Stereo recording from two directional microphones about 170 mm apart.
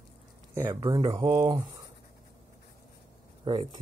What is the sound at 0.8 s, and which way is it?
Speech, 25° right (ahead or behind).